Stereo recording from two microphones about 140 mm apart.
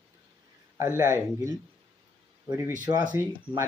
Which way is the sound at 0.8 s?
20° right (ahead or behind).